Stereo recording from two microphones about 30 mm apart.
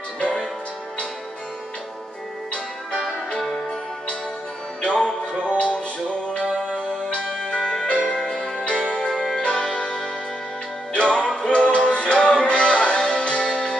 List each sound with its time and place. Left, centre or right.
5.4 s music: left
9.1 s music: centre
9.4 s music: left
11.0 s music: left
13.5 s music: left